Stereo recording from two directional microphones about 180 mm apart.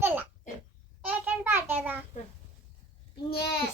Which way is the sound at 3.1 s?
60° left (ahead or behind).